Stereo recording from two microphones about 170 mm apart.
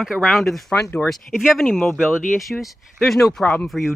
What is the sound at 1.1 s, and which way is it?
Speech, centre (ahead or behind).